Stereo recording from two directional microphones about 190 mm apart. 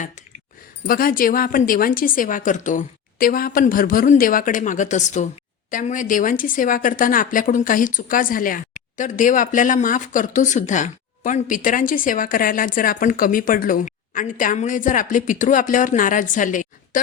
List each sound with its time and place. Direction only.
0.9 s speech: 50° left (ahead or behind)